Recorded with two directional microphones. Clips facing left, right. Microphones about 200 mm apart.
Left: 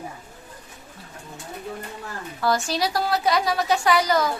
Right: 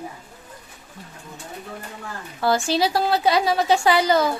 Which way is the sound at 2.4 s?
30° right (ahead or behind).